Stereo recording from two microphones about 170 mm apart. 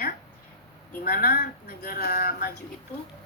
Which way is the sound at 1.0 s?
65° left (ahead or behind).